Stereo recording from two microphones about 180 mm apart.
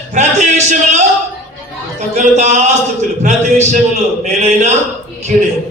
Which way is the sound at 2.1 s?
40° right (ahead or behind).